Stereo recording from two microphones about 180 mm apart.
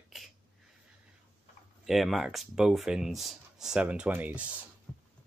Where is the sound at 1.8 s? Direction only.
Centre (ahead or behind).